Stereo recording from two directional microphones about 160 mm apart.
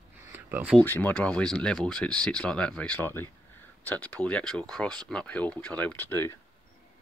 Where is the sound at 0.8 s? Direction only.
10° left (ahead or behind).